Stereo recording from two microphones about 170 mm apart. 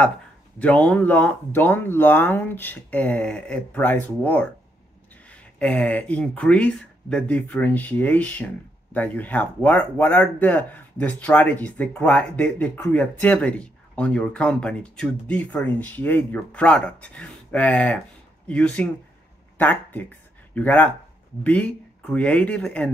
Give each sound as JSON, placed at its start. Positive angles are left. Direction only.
{"t": 0.6, "sound": "speech", "side_deg": 10}